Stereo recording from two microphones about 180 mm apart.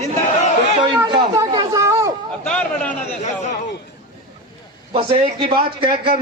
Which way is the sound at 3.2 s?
40° left (ahead or behind).